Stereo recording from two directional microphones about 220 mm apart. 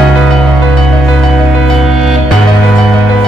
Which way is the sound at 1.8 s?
Centre (ahead or behind).